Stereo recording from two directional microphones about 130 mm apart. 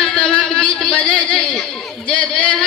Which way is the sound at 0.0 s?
5° left (ahead or behind).